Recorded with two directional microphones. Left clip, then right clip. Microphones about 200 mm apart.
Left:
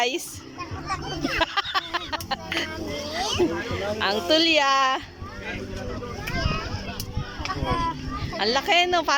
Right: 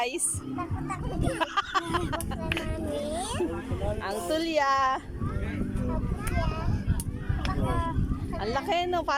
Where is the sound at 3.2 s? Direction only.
45° right (ahead or behind).